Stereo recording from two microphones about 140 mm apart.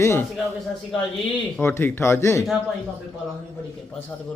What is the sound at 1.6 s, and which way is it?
Speech, 15° left (ahead or behind).